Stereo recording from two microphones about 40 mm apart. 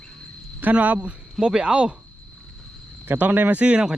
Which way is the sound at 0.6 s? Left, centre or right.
Right.